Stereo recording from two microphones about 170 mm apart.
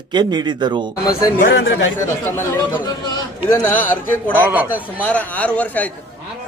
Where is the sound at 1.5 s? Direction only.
90° left.